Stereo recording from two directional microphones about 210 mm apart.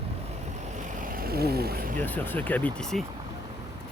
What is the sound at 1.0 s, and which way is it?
Vehicle, 45° right (ahead or behind).